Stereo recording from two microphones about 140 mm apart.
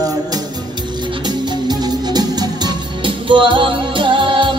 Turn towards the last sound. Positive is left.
turn(degrees=-35)  # may be behind; listen again after turning